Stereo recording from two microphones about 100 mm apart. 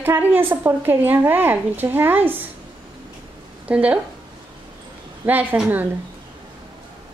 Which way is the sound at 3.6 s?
15° right (ahead or behind).